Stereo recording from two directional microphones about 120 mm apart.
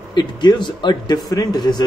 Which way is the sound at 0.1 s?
40° left (ahead or behind).